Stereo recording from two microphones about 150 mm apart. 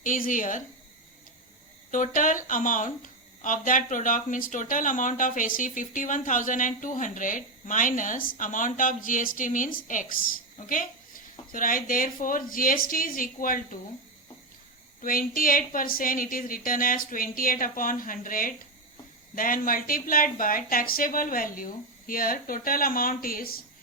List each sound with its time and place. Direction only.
0.0 s speech: 60° left (ahead or behind)
1.9 s speech: 60° left (ahead or behind)
11.5 s speech: 65° left (ahead or behind)
15.0 s speech: 70° left (ahead or behind)